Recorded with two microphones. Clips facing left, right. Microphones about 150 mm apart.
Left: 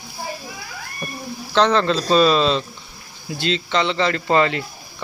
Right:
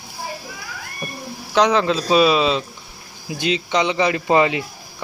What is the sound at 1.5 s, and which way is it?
A man's voice, 10° right (ahead or behind).